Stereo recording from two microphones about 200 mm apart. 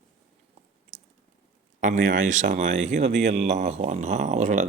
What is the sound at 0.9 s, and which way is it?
Squish, 35° right (ahead or behind).